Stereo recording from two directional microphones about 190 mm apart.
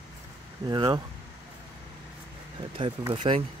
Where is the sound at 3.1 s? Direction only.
30° right (ahead or behind).